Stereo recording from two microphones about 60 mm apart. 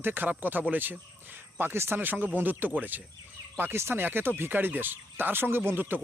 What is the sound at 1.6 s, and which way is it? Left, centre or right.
Speech, right.